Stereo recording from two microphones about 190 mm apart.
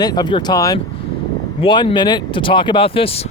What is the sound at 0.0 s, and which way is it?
Speech, 20° left (ahead or behind).